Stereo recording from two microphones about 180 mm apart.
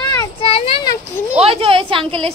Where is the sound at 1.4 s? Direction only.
30° right (ahead or behind).